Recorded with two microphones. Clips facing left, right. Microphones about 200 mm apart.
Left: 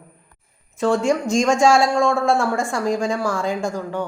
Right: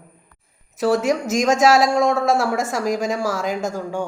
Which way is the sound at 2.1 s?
5° right (ahead or behind).